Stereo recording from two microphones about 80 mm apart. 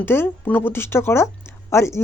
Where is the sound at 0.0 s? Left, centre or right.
Left.